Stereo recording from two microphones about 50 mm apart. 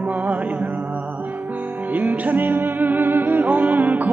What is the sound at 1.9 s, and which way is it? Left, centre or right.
Music, right.